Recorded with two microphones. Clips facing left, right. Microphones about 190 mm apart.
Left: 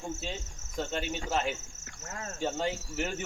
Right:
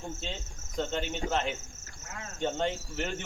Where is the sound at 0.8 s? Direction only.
10° left (ahead or behind).